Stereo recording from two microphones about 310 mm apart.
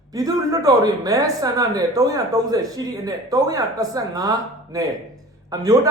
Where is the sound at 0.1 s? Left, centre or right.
Centre.